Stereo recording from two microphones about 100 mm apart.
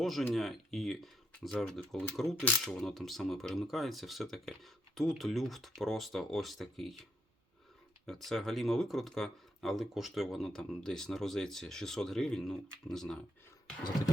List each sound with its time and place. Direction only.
0.0 s speech: centre (ahead or behind)
2.3 s speech: 15° left (ahead or behind)
2.6 s speech: centre (ahead or behind)
8.0 s speech: centre (ahead or behind)